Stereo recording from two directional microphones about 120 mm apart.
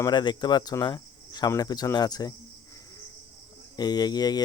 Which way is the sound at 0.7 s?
35° left (ahead or behind).